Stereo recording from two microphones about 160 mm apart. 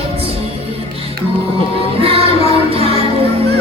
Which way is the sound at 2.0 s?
40° right (ahead or behind).